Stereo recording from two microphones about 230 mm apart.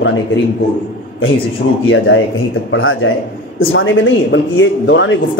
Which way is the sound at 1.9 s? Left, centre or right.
Left.